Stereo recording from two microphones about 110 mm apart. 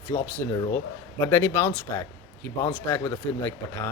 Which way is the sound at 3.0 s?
30° left (ahead or behind).